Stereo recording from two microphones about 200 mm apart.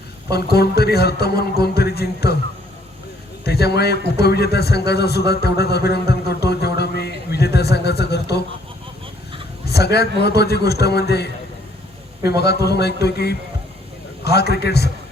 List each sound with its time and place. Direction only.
0.3 s a man's voice: 50° left (ahead or behind)
3.4 s a man's voice: 55° left (ahead or behind)
9.6 s a man's voice: 55° left (ahead or behind)
12.4 s a man's voice: 55° left (ahead or behind)